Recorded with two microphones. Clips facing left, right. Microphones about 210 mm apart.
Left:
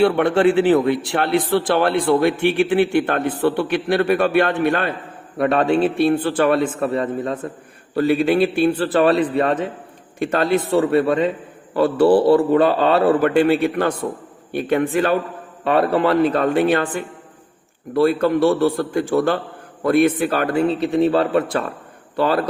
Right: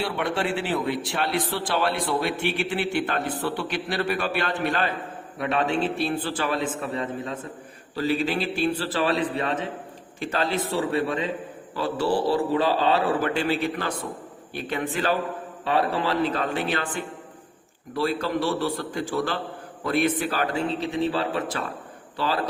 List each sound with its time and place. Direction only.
0.0 s a man's voice: 60° left (ahead or behind)